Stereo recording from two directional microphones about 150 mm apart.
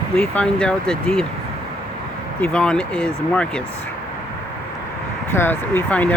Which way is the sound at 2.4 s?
5° left (ahead or behind).